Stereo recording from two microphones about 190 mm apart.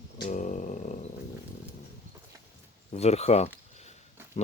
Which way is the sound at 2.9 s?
35° left (ahead or behind).